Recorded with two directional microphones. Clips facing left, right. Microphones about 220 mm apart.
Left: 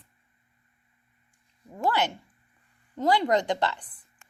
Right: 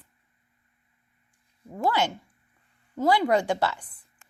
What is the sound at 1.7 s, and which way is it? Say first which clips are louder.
Speech: right 1 dB; 10° right (ahead or behind).